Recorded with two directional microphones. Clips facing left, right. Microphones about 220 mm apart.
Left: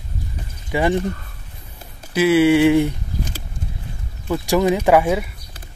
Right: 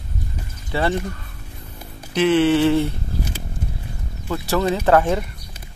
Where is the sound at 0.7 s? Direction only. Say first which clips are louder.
Left 3 dB; 15° left (ahead or behind).